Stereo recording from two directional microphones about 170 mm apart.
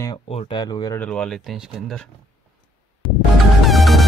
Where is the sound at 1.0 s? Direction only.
5° left (ahead or behind).